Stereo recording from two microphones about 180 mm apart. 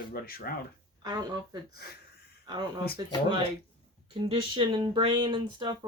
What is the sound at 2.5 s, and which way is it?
Speech, 25° right (ahead or behind).